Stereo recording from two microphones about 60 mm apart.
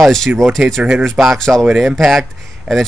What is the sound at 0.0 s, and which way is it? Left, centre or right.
Speech, centre.